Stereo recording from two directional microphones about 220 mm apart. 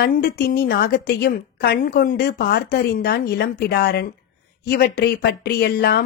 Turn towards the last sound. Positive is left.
turn(degrees=45)  # may be behind; listen again after turning